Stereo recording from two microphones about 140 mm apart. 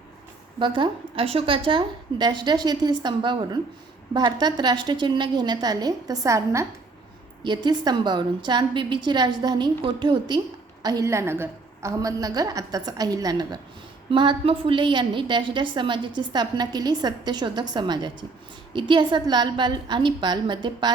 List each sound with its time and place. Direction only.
0.6 s a woman's voice: 35° right (ahead or behind)
7.4 s a woman's voice: 30° right (ahead or behind)